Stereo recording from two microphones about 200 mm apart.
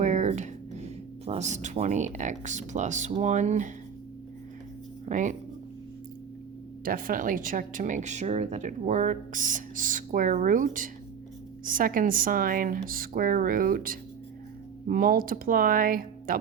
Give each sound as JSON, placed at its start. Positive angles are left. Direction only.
{"t": 0.0, "sound": "speech", "side_deg": -40}
{"t": 5.0, "sound": "speech", "side_deg": -40}
{"t": 6.8, "sound": "speech", "side_deg": -45}